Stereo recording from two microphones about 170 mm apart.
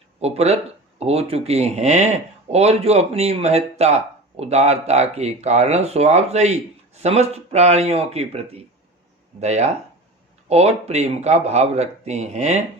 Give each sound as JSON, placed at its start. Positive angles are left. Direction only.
{"t": 0.2, "sound": "speech", "side_deg": -40}